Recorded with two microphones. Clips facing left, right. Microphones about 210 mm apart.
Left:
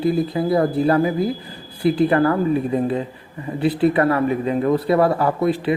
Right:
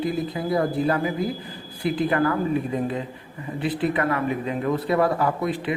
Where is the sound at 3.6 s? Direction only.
35° left (ahead or behind).